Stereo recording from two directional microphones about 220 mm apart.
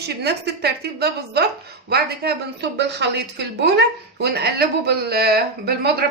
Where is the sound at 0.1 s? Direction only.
50° right (ahead or behind).